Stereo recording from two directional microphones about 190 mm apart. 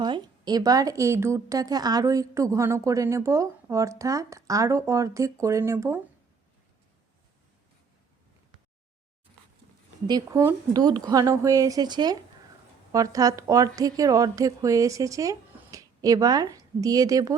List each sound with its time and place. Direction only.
0.0 s a woman's voice: 20° right (ahead or behind)
10.1 s a woman's voice: 20° right (ahead or behind)